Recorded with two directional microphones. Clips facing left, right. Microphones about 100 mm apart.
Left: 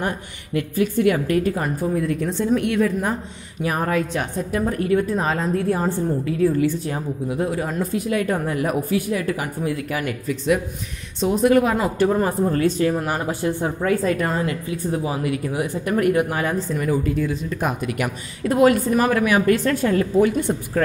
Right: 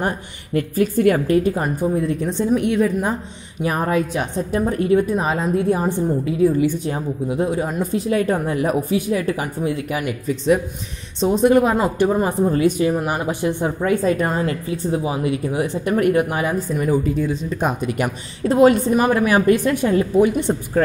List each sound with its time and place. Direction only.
0.6 s speech: 40° right (ahead or behind)
1.2 s speech: 25° right (ahead or behind)
8.1 s speech: 30° right (ahead or behind)
15.0 s speech: 20° right (ahead or behind)
16.4 s speech: 15° right (ahead or behind); by 19.5 s 30° right (ahead or behind)
19.5 s speech: 15° right (ahead or behind)